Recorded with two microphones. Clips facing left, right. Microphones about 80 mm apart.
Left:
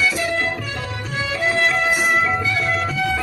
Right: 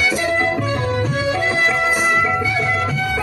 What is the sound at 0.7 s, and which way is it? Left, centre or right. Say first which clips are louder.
Music: right 8 dB; right.